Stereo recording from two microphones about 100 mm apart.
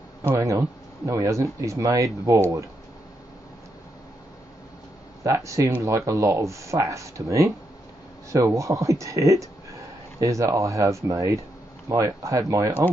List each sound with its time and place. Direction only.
0.4 s speech: 35° right (ahead or behind)
5.2 s speech: 30° right (ahead or behind)